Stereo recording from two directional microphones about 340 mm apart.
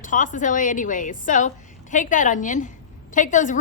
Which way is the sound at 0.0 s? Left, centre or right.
Left.